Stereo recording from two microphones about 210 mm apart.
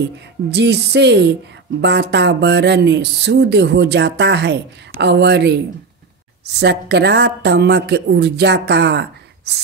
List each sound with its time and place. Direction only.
0.5 s speech: 55° right (ahead or behind)
6.6 s speech: 55° right (ahead or behind)